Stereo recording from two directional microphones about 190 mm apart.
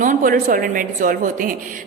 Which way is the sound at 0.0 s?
45° right (ahead or behind).